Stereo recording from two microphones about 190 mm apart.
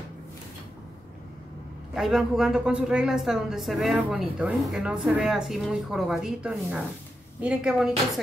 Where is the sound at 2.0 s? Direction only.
Centre (ahead or behind).